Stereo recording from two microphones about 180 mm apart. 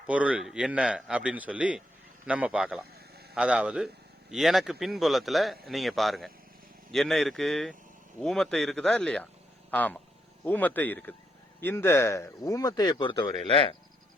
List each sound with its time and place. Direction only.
0.1 s a man's voice: 5° right (ahead or behind); by 13.7 s 30° left (ahead or behind)